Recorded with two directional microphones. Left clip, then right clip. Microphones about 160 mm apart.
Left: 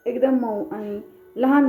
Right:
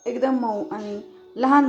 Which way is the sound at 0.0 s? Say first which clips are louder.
Left 2 dB; 5° left (ahead or behind).